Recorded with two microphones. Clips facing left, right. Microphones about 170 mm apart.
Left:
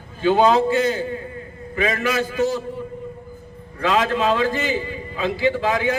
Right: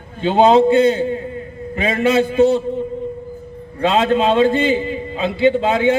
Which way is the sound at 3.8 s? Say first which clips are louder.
Right 4 dB; 25° right (ahead or behind).